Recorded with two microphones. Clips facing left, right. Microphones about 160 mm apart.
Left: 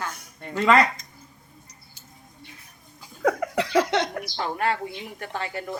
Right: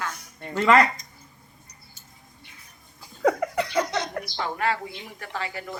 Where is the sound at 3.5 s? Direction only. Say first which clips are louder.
Left 4 dB; 90° left.